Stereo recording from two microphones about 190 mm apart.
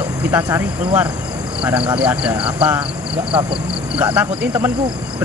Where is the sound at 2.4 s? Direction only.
30° right (ahead or behind).